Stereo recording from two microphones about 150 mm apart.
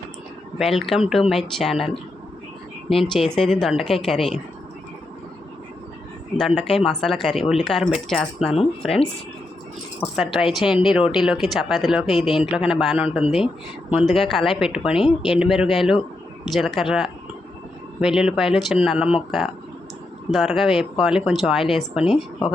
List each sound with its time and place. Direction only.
0.6 s speech: centre (ahead or behind)
6.3 s speech: centre (ahead or behind)
6.6 s a woman's voice: 40° left (ahead or behind)
6.8 s speech: centre (ahead or behind)
10.2 s speech: centre (ahead or behind)